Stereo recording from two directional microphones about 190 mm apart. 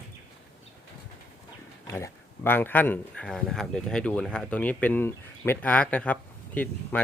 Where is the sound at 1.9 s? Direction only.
15° left (ahead or behind).